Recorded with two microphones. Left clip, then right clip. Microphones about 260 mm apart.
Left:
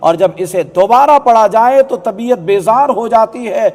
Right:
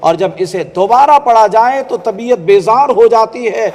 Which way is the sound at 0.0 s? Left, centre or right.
Left.